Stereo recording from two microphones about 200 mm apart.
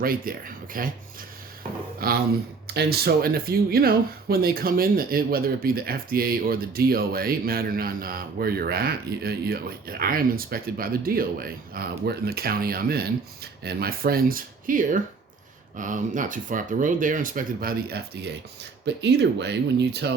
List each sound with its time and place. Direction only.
0.0 s speech: 45° right (ahead or behind)
2.0 s speech: 50° right (ahead or behind)